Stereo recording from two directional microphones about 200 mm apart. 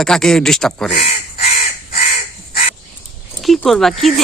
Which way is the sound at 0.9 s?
30° left (ahead or behind).